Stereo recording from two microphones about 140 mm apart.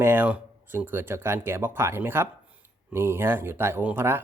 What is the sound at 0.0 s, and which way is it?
Speech, 15° right (ahead or behind).